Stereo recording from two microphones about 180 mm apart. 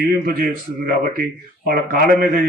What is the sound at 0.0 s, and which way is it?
Speech, 55° right (ahead or behind).